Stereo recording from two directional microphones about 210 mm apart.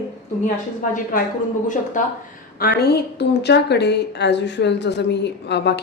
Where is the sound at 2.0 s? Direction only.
40° left (ahead or behind).